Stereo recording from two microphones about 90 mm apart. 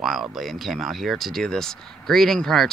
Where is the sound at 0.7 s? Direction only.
Centre (ahead or behind).